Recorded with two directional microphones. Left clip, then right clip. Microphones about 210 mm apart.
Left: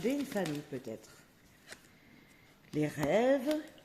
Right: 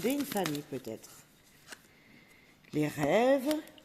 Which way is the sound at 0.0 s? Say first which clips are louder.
Right 2 dB; 45° right (ahead or behind).